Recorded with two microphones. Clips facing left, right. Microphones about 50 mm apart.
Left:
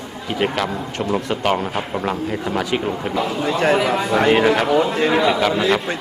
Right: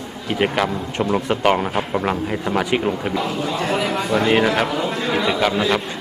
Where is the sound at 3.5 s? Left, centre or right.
Left.